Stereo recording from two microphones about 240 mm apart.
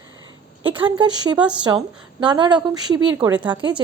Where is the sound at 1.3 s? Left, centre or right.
Centre.